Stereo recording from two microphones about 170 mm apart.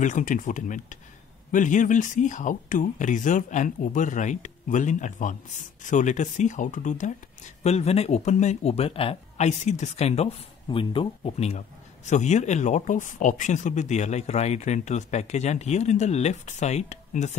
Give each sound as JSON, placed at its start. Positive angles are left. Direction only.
{"t": 0.0, "sound": "speech", "side_deg": 50}